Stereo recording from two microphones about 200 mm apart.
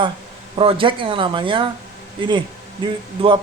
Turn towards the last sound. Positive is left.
turn(degrees=-25)  # may be behind; listen again after turning